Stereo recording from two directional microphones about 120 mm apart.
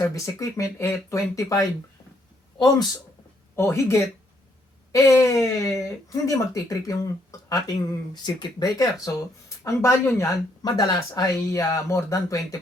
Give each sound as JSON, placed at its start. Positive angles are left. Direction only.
{"t": 0.1, "sound": "speech", "side_deg": 25}
{"t": 3.5, "sound": "speech", "side_deg": 20}
{"t": 10.6, "sound": "speech", "side_deg": 35}